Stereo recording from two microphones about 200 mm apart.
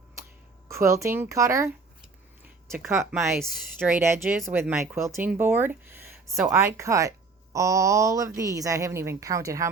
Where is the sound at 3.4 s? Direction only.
Centre (ahead or behind).